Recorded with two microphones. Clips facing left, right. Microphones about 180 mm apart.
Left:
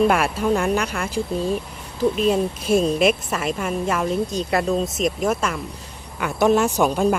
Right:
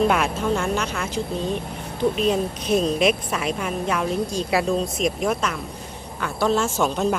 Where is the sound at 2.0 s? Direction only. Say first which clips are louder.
Left 2 dB; centre (ahead or behind).